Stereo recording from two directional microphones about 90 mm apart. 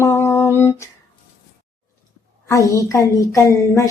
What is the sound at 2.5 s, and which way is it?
Speech, 35° left (ahead or behind).